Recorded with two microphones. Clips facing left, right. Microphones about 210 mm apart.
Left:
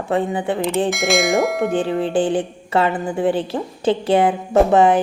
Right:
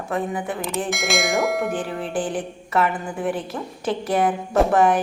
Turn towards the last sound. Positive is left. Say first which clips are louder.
# left 4 dB
turn(degrees=25)  # may be behind; listen again after turning